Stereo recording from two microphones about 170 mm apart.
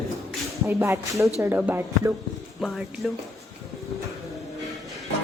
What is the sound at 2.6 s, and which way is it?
Speech, centre (ahead or behind).